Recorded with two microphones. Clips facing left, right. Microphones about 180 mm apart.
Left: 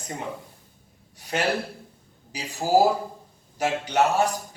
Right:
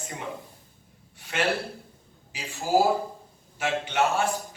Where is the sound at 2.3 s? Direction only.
40° left (ahead or behind).